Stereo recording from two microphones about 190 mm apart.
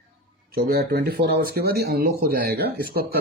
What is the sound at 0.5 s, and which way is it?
Speech, 55° right (ahead or behind).